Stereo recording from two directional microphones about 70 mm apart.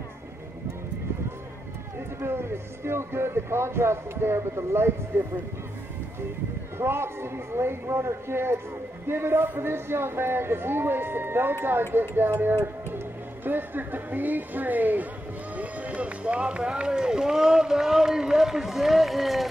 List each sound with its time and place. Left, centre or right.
2.1 s speech: right
6.8 s speech: right; by 19.4 s centre